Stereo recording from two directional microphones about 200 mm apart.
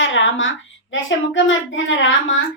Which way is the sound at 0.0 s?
70° left (ahead or behind).